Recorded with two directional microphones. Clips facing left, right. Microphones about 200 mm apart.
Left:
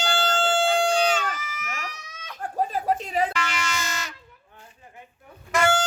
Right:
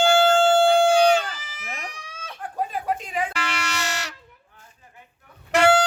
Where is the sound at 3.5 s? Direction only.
70° right (ahead or behind).